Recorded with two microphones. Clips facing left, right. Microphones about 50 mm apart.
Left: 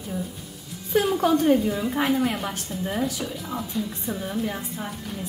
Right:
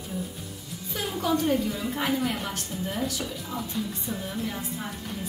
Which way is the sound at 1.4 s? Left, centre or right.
Left.